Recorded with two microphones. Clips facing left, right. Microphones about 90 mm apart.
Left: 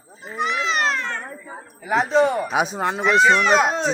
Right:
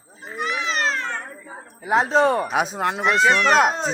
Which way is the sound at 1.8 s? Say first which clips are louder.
Right 1 dB; 25° right (ahead or behind).